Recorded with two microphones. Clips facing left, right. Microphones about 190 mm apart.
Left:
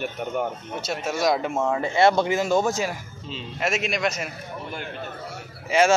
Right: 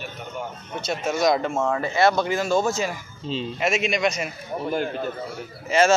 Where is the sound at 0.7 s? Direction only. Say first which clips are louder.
Right 4 dB; 5° left (ahead or behind).